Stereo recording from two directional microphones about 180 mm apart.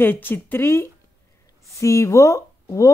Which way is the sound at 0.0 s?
10° left (ahead or behind).